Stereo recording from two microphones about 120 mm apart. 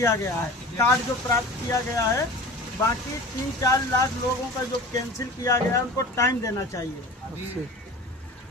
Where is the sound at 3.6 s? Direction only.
30° left (ahead or behind).